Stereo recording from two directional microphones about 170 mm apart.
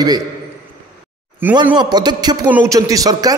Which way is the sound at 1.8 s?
25° right (ahead or behind).